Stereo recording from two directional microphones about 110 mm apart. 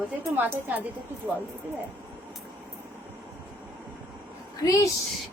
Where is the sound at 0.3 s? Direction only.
20° right (ahead or behind).